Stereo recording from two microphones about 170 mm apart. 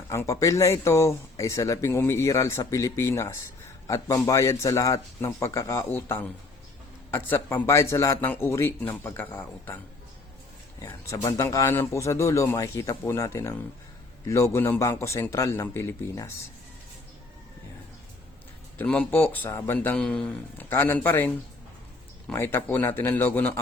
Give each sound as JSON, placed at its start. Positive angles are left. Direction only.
{"t": 0.1, "sound": "speech", "side_deg": 15}
{"t": 18.8, "sound": "speech", "side_deg": 10}